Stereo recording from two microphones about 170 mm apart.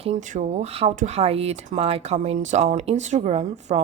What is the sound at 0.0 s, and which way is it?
Speech, 45° right (ahead or behind).